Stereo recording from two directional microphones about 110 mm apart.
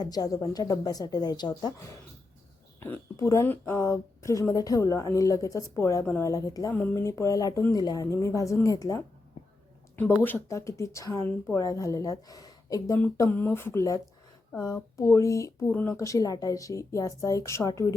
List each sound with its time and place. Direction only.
0.0 s a woman's voice: 35° left (ahead or behind)
3.2 s a woman's voice: 30° left (ahead or behind)
10.5 s a woman's voice: 25° left (ahead or behind)
13.3 s a woman's voice: 20° left (ahead or behind)